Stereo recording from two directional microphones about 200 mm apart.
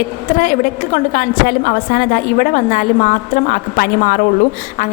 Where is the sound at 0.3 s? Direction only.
40° left (ahead or behind).